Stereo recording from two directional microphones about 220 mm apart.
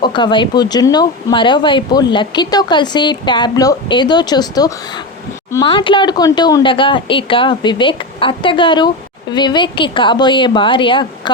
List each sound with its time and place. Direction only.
0.0 s speech: 20° left (ahead or behind)